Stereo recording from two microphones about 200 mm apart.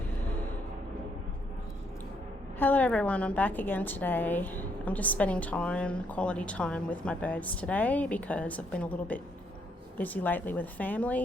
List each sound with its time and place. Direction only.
0.1 s music: 10° left (ahead or behind)
2.6 s a woman's voice: 10° left (ahead or behind)